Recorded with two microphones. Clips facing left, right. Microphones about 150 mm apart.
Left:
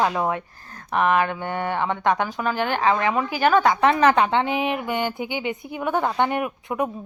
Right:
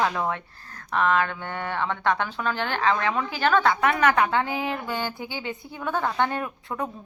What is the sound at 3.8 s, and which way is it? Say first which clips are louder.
A woman's voice: left 4 dB; 25° left (ahead or behind).